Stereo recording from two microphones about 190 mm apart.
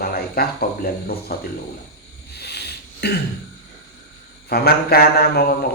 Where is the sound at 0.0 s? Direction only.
55° left (ahead or behind).